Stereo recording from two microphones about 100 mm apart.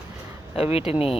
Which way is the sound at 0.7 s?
75° left (ahead or behind).